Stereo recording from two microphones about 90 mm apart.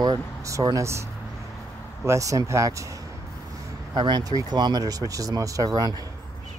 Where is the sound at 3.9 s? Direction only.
55° right (ahead or behind).